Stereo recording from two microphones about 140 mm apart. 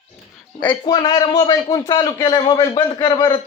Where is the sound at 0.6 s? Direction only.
30° left (ahead or behind).